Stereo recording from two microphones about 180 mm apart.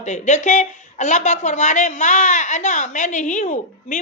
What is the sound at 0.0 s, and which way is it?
A woman's voice, 40° left (ahead or behind).